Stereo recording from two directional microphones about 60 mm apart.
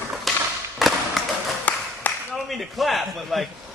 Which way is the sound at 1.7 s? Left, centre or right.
Left.